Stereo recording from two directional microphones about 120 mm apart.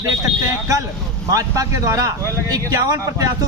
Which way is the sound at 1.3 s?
30° right (ahead or behind).